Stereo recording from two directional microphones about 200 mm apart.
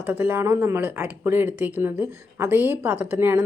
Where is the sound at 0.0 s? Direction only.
10° right (ahead or behind).